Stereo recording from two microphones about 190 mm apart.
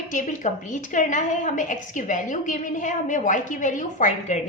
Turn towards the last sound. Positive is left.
turn(degrees=40)  # may be behind; listen again after turning